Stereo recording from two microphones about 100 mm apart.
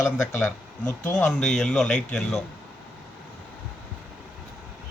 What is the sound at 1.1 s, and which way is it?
Speech, 10° left (ahead or behind).